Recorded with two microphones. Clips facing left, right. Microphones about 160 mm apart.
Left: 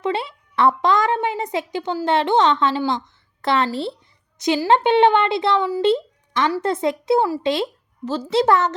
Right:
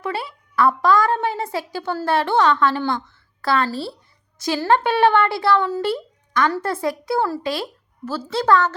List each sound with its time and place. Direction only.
0.0 s a child's voice: 25° left (ahead or behind)